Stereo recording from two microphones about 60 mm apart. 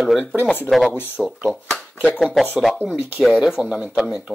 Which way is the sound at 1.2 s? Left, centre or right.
Centre.